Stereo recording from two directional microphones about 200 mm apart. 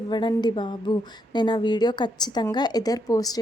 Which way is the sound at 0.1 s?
20° left (ahead or behind).